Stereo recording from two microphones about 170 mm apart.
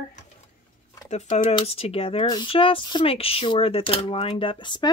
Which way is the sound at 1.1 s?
35° left (ahead or behind).